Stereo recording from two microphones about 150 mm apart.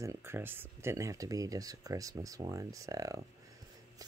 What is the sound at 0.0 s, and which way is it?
Speech, 20° right (ahead or behind).